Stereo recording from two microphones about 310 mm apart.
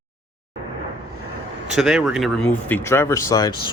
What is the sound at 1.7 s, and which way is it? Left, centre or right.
Speech, centre.